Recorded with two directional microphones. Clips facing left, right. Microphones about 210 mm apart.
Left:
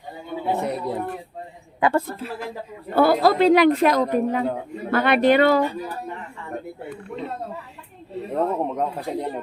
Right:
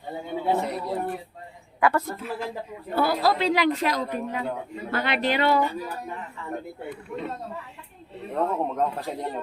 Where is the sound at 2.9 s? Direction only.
55° left (ahead or behind).